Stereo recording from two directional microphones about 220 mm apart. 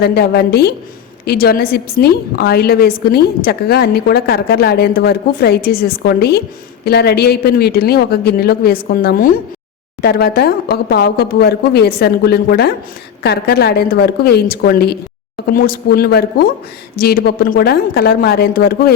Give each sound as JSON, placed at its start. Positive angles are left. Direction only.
{"t": 0.0, "sound": "a woman's voice", "side_deg": 45}